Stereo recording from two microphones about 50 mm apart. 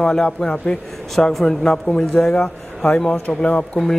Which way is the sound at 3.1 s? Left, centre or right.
Left.